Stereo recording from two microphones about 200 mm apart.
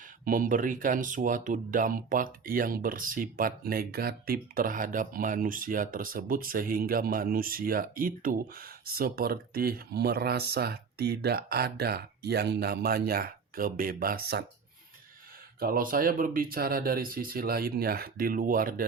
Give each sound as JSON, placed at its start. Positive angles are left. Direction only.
{"t": 0.3, "sound": "speech", "side_deg": -40}
{"t": 15.6, "sound": "speech", "side_deg": -45}